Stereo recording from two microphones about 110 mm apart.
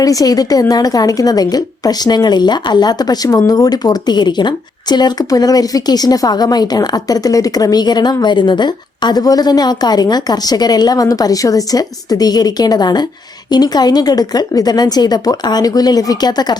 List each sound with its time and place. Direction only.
0.0 s a woman's voice: 35° left (ahead or behind)